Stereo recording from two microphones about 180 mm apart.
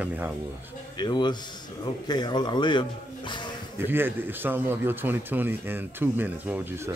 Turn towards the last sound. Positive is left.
turn(degrees=-15)  # may be behind; listen again after turning